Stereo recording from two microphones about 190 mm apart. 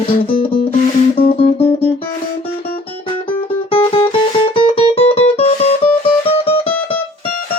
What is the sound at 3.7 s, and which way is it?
Music, 30° left (ahead or behind).